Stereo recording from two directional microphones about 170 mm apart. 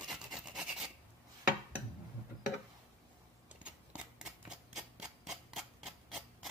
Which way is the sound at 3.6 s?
5° right (ahead or behind).